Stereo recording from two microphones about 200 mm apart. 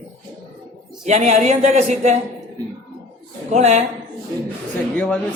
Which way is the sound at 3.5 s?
35° right (ahead or behind).